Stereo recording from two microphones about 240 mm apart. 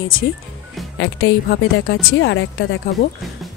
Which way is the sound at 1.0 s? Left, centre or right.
Left.